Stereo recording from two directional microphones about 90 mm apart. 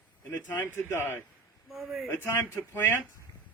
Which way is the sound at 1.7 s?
Centre (ahead or behind).